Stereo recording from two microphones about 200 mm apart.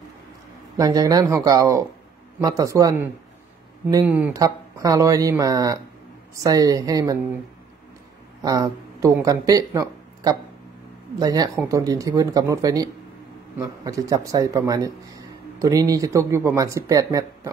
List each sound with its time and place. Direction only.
0.7 s speech: 15° right (ahead or behind)
8.4 s speech: 15° right (ahead or behind)